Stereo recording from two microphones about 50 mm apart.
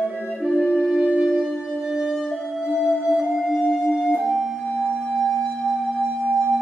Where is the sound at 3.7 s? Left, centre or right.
Centre.